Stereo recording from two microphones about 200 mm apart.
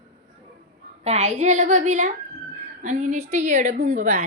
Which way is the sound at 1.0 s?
35° right (ahead or behind).